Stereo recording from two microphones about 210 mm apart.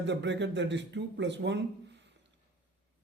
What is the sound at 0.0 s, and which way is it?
A man's voice, 55° right (ahead or behind).